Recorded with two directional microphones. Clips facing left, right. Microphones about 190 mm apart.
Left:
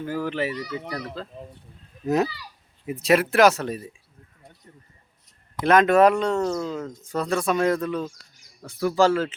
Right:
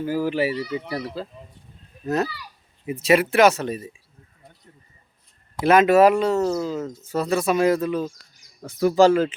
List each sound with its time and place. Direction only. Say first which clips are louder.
0.0 s speech: right 4 dB; 5° right (ahead or behind)
0.5 s a child's voice: right 4 dB; 25° right (ahead or behind)
1.0 s speech: right 3 dB; 10° right (ahead or behind)
2.8 s speech: right 2 dB; centre (ahead or behind)
5.6 s speech: right 2 dB; 5° right (ahead or behind)
8.6 s speech: right 4 dB; 20° right (ahead or behind)